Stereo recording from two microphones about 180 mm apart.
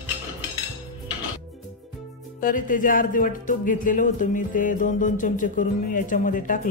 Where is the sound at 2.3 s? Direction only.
50° left (ahead or behind).